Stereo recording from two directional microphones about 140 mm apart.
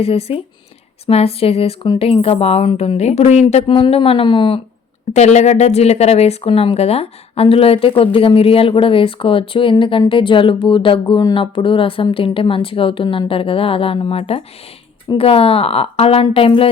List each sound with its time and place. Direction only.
0.0 s a woman's voice: 45° left (ahead or behind)
5.1 s a woman's voice: 55° left (ahead or behind)